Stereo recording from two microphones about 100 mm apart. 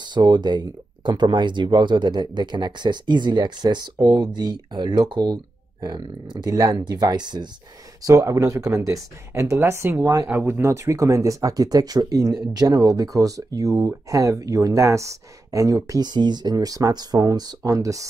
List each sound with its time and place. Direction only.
0.0 s speech: 50° right (ahead or behind)
8.0 s speech: 35° right (ahead or behind)
10.2 s speech: 20° right (ahead or behind)
16.1 s speech: 45° right (ahead or behind)